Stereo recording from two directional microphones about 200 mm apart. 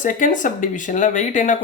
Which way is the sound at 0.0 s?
40° left (ahead or behind).